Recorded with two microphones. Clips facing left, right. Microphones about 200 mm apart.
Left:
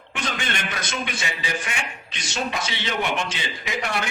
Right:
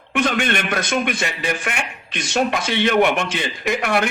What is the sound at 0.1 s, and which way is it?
A man's voice, 60° right (ahead or behind).